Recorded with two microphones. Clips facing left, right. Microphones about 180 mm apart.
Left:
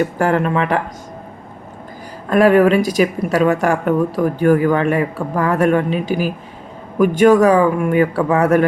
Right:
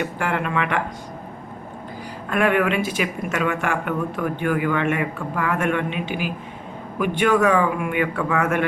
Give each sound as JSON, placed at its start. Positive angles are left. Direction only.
{"t": 0.0, "sound": "speech", "side_deg": 40}
{"t": 2.3, "sound": "speech", "side_deg": 35}